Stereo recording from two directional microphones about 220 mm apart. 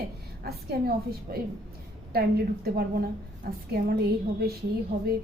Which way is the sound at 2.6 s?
45° right (ahead or behind).